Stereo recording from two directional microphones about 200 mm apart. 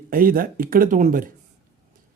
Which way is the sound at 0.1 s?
45° right (ahead or behind).